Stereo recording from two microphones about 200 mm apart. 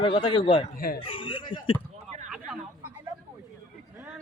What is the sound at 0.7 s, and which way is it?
Speech, 45° left (ahead or behind).